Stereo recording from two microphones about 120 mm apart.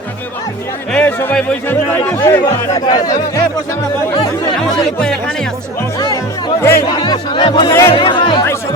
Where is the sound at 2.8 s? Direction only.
35° left (ahead or behind).